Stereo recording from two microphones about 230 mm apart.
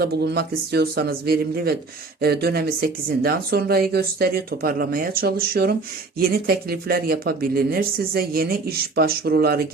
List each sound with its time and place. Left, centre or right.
0.0 s speech: right